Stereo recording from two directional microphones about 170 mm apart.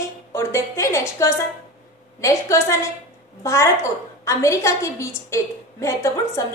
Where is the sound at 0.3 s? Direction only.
15° left (ahead or behind).